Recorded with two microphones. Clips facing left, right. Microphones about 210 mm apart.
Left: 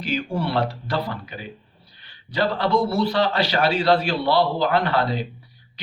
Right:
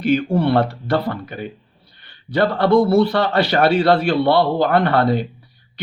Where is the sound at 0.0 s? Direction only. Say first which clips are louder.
Right 8 dB; 55° right (ahead or behind).